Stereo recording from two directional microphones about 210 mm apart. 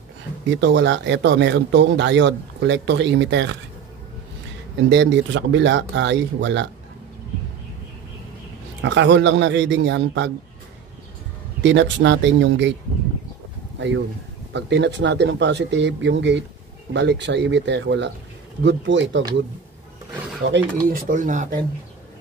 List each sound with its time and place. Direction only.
0.5 s speech: 60° right (ahead or behind)
4.8 s speech: 55° right (ahead or behind)
8.8 s speech: 60° right (ahead or behind)
11.6 s speech: 60° right (ahead or behind)
13.7 s speech: 55° right (ahead or behind)
20.4 s speech: 60° right (ahead or behind)
20.9 s speech: 40° right (ahead or behind)